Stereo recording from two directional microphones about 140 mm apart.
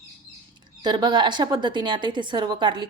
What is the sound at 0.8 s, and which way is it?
A woman's voice, 30° right (ahead or behind).